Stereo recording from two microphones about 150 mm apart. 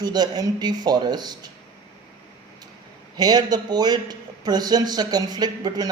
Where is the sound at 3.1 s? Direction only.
25° right (ahead or behind).